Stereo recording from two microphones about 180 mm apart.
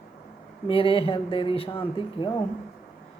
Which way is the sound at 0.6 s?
30° left (ahead or behind).